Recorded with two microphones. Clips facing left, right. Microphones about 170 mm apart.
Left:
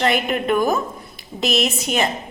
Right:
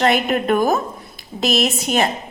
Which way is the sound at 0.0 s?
40° right (ahead or behind).